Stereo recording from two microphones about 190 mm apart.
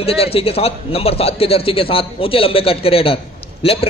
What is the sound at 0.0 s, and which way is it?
A man's voice, 30° left (ahead or behind).